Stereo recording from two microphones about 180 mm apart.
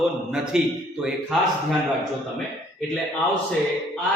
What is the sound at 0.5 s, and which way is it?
Speech, 5° right (ahead or behind).